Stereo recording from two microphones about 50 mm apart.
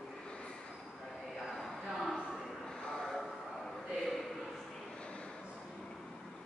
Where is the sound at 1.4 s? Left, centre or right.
Centre.